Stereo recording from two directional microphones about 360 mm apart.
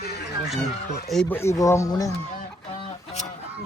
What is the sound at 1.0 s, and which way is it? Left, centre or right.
Speech, centre.